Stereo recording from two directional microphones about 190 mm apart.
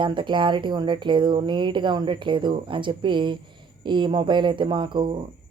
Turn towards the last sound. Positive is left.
turn(degrees=-25)  # may be behind; listen again after turning